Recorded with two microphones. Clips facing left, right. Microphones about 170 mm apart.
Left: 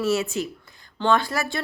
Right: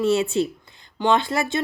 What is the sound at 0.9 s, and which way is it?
Speech, 20° right (ahead or behind).